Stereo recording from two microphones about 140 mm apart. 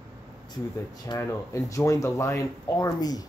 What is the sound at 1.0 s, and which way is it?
Speech, 20° left (ahead or behind).